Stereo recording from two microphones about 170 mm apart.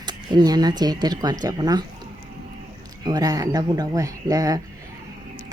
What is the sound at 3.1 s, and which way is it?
Speech, 20° right (ahead or behind).